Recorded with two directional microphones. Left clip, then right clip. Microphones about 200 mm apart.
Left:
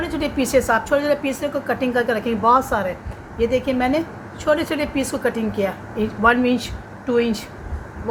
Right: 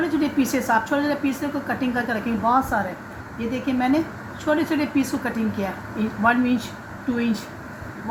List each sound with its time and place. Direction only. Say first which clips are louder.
0.0 s speech: even; 35° left (ahead or behind)